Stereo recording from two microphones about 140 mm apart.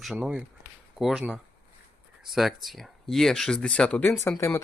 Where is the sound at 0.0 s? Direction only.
5° right (ahead or behind).